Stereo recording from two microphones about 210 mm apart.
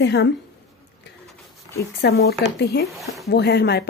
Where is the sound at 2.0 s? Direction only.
50° left (ahead or behind).